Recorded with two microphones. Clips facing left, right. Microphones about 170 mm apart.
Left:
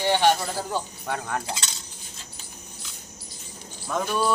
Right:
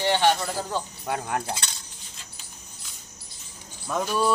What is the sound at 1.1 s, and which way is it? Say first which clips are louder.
Speech: right 1 dB; 5° right (ahead or behind).